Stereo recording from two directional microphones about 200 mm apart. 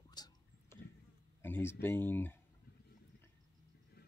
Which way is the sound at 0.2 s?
20° left (ahead or behind).